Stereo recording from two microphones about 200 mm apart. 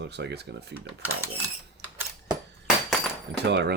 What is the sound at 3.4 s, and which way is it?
Speech, 60° right (ahead or behind).